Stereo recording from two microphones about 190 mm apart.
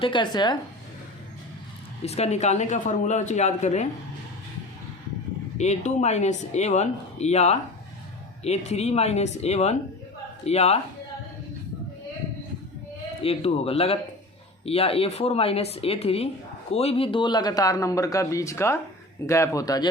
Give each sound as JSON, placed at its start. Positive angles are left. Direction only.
{"t": 0.0, "sound": "speech", "side_deg": 25}
{"t": 2.0, "sound": "speech", "side_deg": 35}
{"t": 5.5, "sound": "speech", "side_deg": 35}
{"t": 13.2, "sound": "speech", "side_deg": 30}